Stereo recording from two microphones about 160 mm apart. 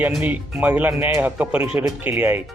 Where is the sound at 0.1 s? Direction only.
10° right (ahead or behind).